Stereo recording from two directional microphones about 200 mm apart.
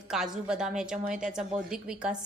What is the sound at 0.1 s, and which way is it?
A woman's voice, 5° right (ahead or behind).